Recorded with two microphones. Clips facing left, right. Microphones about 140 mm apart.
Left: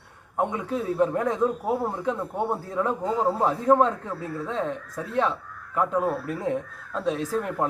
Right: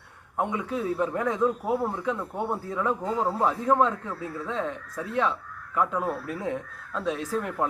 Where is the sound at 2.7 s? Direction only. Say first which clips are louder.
Left 2 dB; 35° left (ahead or behind).